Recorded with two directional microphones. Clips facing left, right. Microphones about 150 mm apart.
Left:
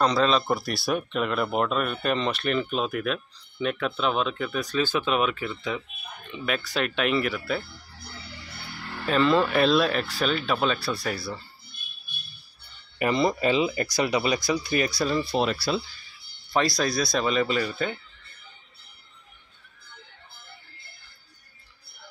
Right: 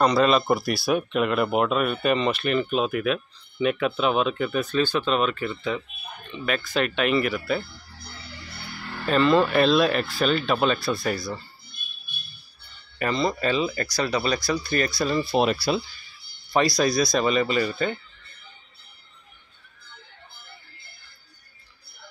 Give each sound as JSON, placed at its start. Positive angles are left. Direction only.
{"t": 0.0, "sound": "speech", "side_deg": -10}
{"t": 4.7, "sound": "speech", "side_deg": 5}
{"t": 9.0, "sound": "speech", "side_deg": 0}
{"t": 13.0, "sound": "speech", "side_deg": 15}
{"t": 15.3, "sound": "speech", "side_deg": -15}
{"t": 16.5, "sound": "speech", "side_deg": 0}